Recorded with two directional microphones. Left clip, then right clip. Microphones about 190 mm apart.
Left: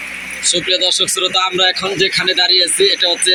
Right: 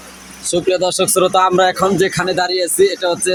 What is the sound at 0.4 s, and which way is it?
Speech, 55° right (ahead or behind).